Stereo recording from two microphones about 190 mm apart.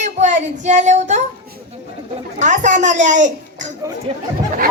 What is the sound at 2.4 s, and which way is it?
A child's voice, 40° right (ahead or behind).